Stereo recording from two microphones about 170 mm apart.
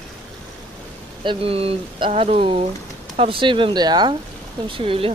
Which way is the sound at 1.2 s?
35° right (ahead or behind).